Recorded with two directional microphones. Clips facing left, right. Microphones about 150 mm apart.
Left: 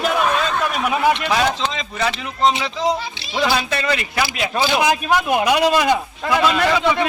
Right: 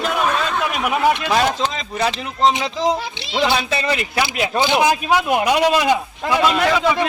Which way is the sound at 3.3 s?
25° right (ahead or behind).